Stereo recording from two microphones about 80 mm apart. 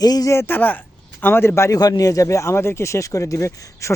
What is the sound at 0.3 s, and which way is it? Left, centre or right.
A man's voice, left.